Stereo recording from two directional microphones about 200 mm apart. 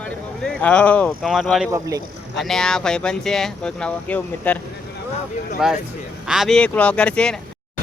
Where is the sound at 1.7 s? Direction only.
15° right (ahead or behind).